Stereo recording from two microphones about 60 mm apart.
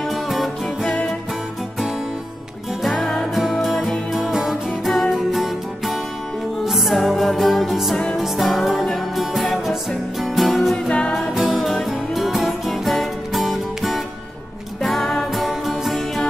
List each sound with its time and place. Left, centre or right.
0.1 s music: centre
2.8 s music: centre
4.2 s music: centre
10.9 s music: centre
11.1 s music: centre